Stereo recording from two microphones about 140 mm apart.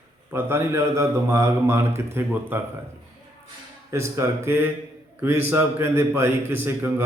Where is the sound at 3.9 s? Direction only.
20° right (ahead or behind).